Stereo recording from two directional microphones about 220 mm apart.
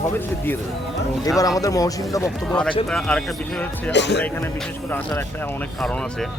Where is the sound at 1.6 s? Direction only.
15° left (ahead or behind).